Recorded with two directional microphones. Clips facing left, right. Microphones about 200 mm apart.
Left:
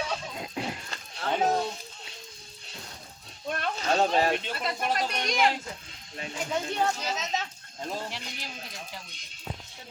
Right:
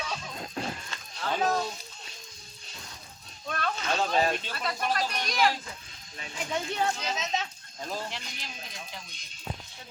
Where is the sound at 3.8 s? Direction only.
35° left (ahead or behind).